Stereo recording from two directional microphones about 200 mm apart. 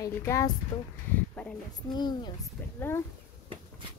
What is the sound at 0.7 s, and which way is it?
Speech, 25° left (ahead or behind).